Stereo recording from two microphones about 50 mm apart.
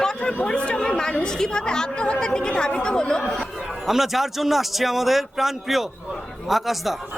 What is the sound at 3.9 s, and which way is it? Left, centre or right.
A man's voice, centre.